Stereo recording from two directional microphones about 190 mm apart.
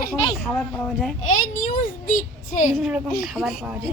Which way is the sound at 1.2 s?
45° left (ahead or behind).